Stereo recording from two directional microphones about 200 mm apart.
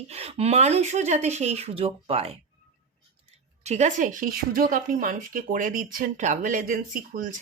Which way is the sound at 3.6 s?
35° right (ahead or behind).